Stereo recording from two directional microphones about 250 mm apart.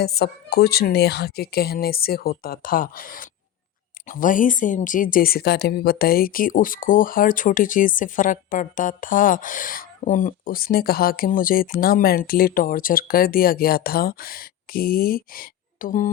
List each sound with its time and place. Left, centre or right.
0.0 s a woman's voice: left